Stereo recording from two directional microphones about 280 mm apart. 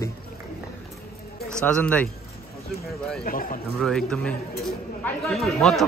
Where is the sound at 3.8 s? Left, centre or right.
Centre.